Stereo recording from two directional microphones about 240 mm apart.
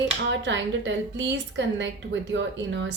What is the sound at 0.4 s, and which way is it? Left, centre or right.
A woman's voice, right.